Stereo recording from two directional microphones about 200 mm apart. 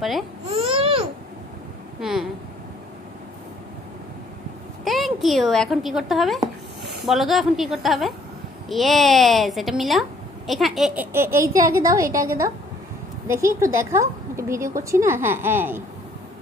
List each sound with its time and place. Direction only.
0.5 s a sound: 25° right (ahead or behind)
2.0 s speech: centre (ahead or behind)
4.8 s a woman's voice: centre (ahead or behind)